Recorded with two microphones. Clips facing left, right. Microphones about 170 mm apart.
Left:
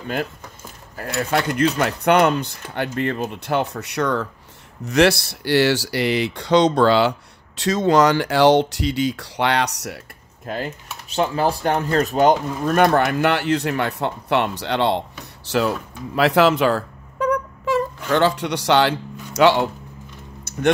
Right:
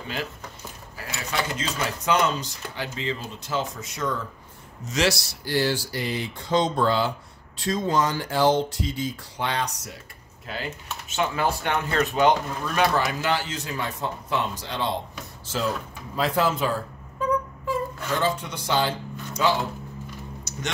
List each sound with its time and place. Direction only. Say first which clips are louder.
0.9 s speech: left 8 dB; 55° left (ahead or behind); by 4.3 s 70° left (ahead or behind)
4.8 s speech: left 8 dB; 60° left (ahead or behind)
10.4 s speech: left 6 dB; 45° left (ahead or behind); by 15.7 s 70° left (ahead or behind)
16.2 s a sound: left 8 dB; 75° left (ahead or behind)
20.5 s music: left 11 dB; 55° left (ahead or behind)